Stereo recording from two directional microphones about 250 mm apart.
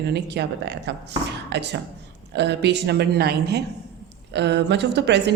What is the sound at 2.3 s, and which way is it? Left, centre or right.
Speech, right.